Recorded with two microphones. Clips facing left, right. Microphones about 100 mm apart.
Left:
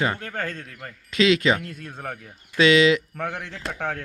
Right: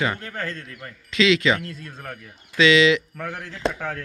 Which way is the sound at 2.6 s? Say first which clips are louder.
Even; 40° left (ahead or behind).